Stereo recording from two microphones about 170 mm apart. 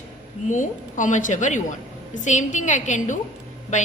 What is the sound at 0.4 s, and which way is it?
A woman's voice, 50° left (ahead or behind).